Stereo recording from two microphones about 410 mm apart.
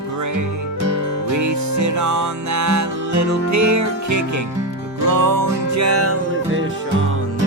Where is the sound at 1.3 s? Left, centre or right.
Right.